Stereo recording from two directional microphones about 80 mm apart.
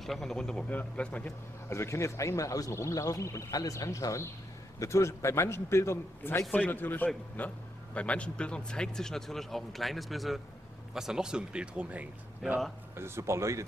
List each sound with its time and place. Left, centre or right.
0.0 s a man's voice: centre
1.7 s a man's voice: left
6.5 s a man's voice: left; by 12.5 s centre
12.9 s speech: right